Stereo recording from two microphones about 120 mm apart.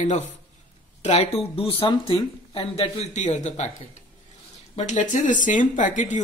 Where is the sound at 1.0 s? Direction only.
60° left (ahead or behind); by 4.0 s 75° left (ahead or behind).